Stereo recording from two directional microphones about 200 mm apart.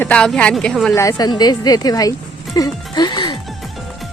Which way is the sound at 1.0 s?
20° left (ahead or behind).